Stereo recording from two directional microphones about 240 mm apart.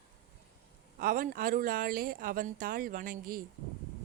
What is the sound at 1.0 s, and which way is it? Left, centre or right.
A woman's voice, right.